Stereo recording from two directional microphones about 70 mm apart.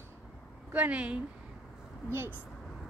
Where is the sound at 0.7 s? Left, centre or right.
Right.